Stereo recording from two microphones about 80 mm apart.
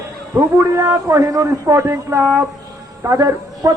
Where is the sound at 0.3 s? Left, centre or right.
Right.